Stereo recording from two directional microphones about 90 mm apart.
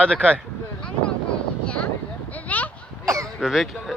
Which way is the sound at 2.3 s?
15° left (ahead or behind).